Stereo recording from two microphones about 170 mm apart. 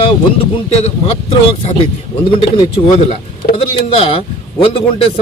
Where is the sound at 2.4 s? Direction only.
35° left (ahead or behind).